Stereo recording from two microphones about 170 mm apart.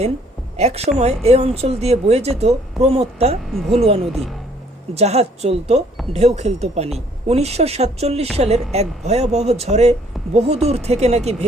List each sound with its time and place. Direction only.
0.5 s speech: 40° right (ahead or behind)
4.1 s a woman's voice: centre (ahead or behind)
4.9 s speech: 40° right (ahead or behind)